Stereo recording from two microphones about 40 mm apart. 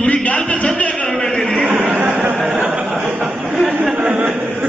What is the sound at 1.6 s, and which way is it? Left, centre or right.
Speech, right.